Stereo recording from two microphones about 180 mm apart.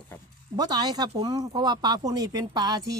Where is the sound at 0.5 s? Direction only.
20° right (ahead or behind).